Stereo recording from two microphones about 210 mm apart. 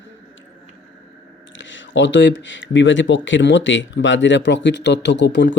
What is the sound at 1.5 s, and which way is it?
Speech, 60° left (ahead or behind).